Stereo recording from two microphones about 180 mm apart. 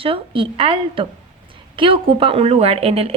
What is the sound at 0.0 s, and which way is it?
Speech, 30° right (ahead or behind).